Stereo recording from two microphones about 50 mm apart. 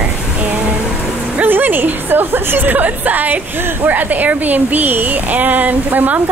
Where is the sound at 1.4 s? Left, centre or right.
Right.